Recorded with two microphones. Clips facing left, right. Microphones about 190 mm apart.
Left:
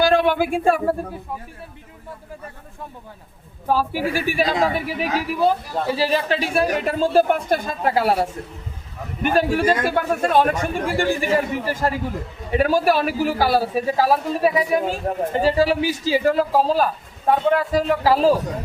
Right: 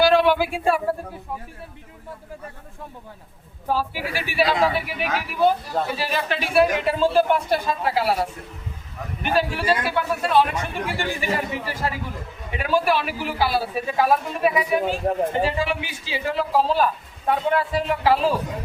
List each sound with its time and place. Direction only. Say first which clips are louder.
0.0 s speech: even; 50° left (ahead or behind)
3.7 s a man's voice: left 4 dB; 45° left (ahead or behind)